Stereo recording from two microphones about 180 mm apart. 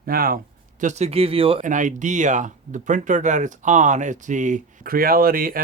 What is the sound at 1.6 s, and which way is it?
Speech, 45° right (ahead or behind).